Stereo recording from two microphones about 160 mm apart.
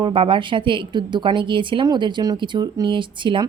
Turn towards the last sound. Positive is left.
turn(degrees=-30)  # may be behind; listen again after turning